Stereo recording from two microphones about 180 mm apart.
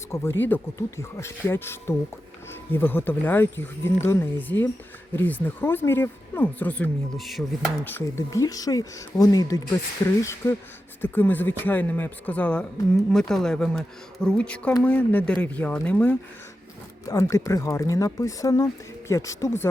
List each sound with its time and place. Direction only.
0.1 s speech: 15° left (ahead or behind)
7.9 s speech: 15° left (ahead or behind)